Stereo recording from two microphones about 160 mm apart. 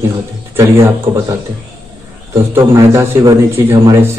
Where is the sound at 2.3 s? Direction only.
20° right (ahead or behind).